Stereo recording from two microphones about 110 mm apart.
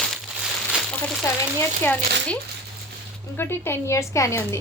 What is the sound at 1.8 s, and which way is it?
Speech, 10° left (ahead or behind).